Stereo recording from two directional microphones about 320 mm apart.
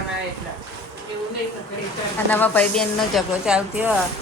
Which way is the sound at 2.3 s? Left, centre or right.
Centre.